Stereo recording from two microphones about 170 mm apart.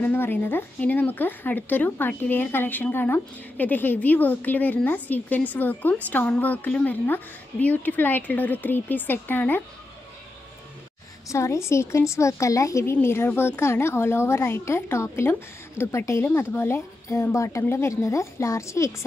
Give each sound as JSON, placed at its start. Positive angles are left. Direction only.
{"t": 0.0, "sound": "speech", "side_deg": 10}
{"t": 11.2, "sound": "speech", "side_deg": 15}